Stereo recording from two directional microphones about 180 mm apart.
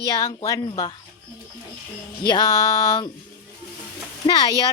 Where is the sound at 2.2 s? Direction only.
20° left (ahead or behind).